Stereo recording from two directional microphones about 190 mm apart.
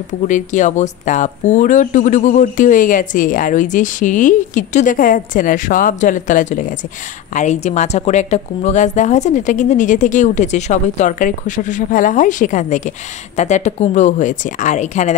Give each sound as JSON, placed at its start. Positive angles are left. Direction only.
{"t": 0.3, "sound": "a woman's voice", "side_deg": 40}